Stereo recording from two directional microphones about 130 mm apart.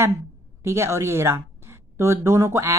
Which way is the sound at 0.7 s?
20° right (ahead or behind).